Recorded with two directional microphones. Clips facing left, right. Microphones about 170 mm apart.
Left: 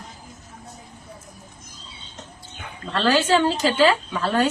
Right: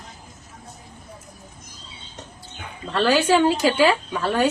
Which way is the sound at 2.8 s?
10° right (ahead or behind).